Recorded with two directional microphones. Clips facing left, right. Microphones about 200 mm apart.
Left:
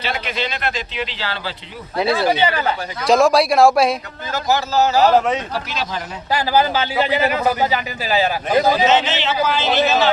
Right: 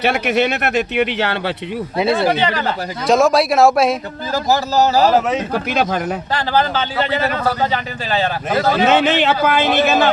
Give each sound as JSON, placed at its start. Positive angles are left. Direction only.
{"t": 0.0, "sound": "speech", "side_deg": -70}
{"t": 2.0, "sound": "speech", "side_deg": 0}
{"t": 4.3, "sound": "speech", "side_deg": -35}
{"t": 5.0, "sound": "speech", "side_deg": -5}
{"t": 5.5, "sound": "speech", "side_deg": -55}
{"t": 6.3, "sound": "a man's voice", "side_deg": 10}
{"t": 8.8, "sound": "speech", "side_deg": -55}